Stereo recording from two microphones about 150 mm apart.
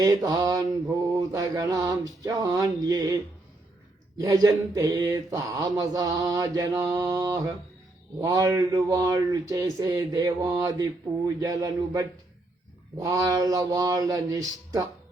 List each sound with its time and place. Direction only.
0.0 s mantra: 25° right (ahead or behind)
4.2 s mantra: 25° right (ahead or behind)